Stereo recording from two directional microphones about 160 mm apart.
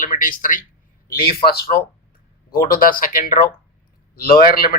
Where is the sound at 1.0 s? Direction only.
70° left (ahead or behind).